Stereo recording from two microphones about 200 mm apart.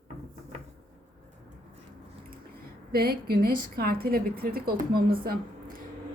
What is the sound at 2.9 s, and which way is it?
A woman's voice, 50° right (ahead or behind).